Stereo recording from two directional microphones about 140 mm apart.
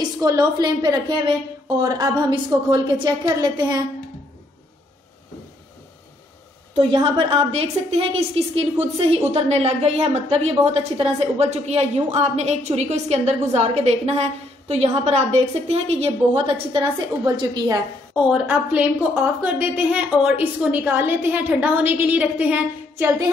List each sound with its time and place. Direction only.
0.0 s a woman's voice: 25° right (ahead or behind)
7.0 s a woman's voice: 35° right (ahead or behind)
17.4 s a woman's voice: 30° right (ahead or behind)
18.1 s a woman's voice: 10° right (ahead or behind)